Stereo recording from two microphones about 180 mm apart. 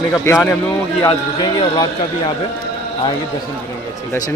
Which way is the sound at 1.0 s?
25° left (ahead or behind).